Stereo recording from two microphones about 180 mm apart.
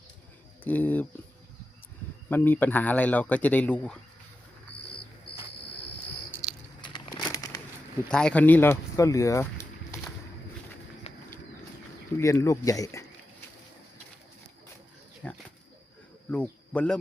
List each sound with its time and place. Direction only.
0.6 s speech: 10° left (ahead or behind)
2.3 s speech: 10° left (ahead or behind)
6.9 s a sound: 25° left (ahead or behind)
8.1 s speech: 5° left (ahead or behind)
11.1 s a sound: 35° left (ahead or behind)
12.1 s speech: 15° left (ahead or behind)
16.3 s speech: 5° left (ahead or behind)